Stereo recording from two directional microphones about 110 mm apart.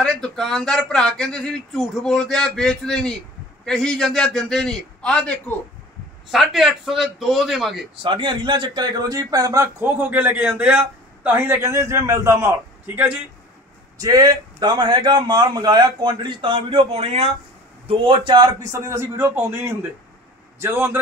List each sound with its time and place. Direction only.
0.0 s a man's voice: 5° left (ahead or behind)
6.3 s speech: centre (ahead or behind)
8.0 s a man's voice: 50° right (ahead or behind); by 13.1 s 15° right (ahead or behind)
13.9 s a man's voice: 35° right (ahead or behind); by 17.3 s 65° right (ahead or behind)
17.8 s a man's voice: 50° right (ahead or behind); by 21.0 s 20° right (ahead or behind)